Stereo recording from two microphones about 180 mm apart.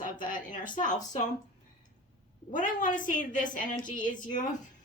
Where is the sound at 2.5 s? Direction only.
45° left (ahead or behind).